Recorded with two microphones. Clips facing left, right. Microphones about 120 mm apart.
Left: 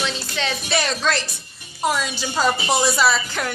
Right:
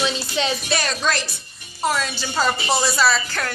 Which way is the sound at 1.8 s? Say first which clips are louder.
Even; 10° left (ahead or behind).